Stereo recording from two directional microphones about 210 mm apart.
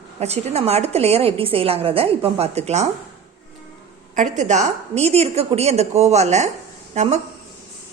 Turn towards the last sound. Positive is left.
turn(degrees=-35)  # may be behind; listen again after turning